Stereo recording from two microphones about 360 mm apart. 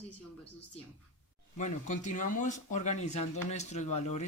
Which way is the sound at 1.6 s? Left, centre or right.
Centre.